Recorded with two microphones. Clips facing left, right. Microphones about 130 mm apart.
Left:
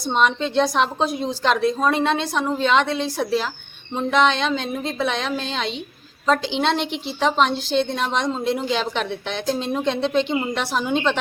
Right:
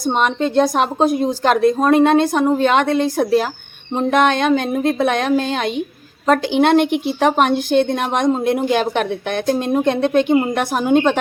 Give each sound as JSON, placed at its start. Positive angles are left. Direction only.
{"t": 0.0, "sound": "a woman's voice", "side_deg": -50}